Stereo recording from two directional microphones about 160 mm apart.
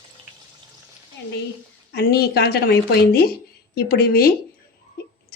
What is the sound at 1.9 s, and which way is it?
A woman's voice, 80° left.